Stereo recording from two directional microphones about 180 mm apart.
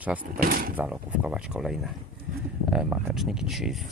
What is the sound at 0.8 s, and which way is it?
Speech, 5° right (ahead or behind).